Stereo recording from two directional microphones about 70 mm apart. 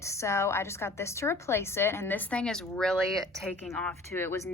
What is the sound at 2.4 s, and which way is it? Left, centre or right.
Speech, centre.